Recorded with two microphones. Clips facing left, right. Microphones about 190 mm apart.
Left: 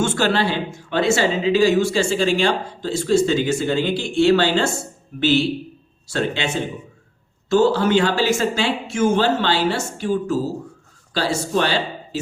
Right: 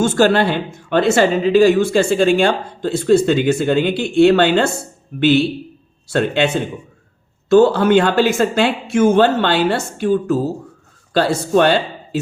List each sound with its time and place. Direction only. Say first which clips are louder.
0.0 s speech: right 6 dB; 45° right (ahead or behind)